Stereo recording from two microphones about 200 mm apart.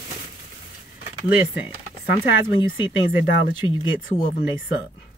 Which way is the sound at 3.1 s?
10° right (ahead or behind).